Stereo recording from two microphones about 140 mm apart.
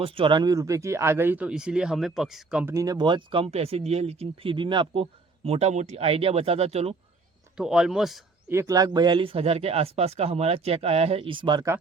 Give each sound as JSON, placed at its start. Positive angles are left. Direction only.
{"t": 0.0, "sound": "speech", "side_deg": -35}
{"t": 2.7, "sound": "speech", "side_deg": -25}
{"t": 5.5, "sound": "speech", "side_deg": -50}
{"t": 7.5, "sound": "speech", "side_deg": -5}
{"t": 8.4, "sound": "speech", "side_deg": -20}